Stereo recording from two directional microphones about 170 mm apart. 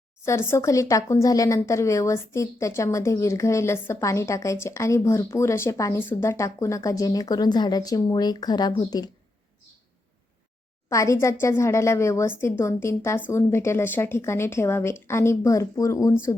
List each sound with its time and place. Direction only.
0.3 s speech: 15° left (ahead or behind)
10.8 s speech: 15° left (ahead or behind)